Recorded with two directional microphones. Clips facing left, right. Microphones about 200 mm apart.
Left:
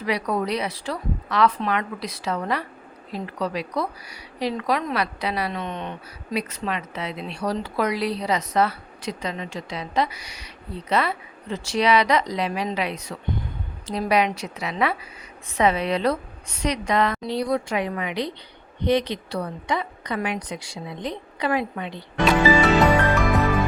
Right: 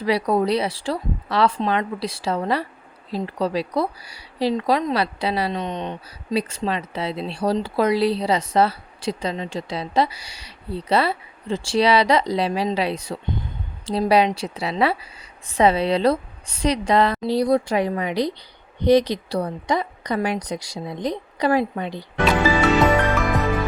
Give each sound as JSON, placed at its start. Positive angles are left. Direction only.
{"t": 0.0, "sound": "speech", "side_deg": -30}